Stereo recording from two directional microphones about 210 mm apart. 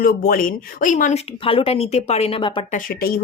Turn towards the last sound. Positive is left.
turn(degrees=45)  # may be behind; listen again after turning